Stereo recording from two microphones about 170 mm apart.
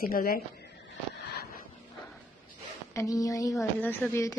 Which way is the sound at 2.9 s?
20° left (ahead or behind).